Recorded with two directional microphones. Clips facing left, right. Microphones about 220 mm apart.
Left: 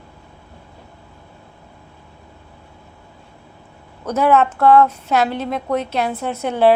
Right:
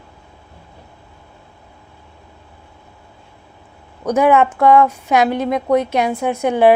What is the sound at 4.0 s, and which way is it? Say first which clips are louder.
A woman's voice: right 2 dB; 15° right (ahead or behind).